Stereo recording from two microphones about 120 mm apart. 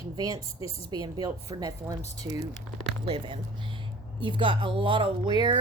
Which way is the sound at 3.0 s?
45° right (ahead or behind).